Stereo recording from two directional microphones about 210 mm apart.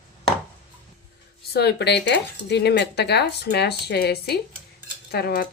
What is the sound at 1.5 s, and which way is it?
Speech, 50° left (ahead or behind).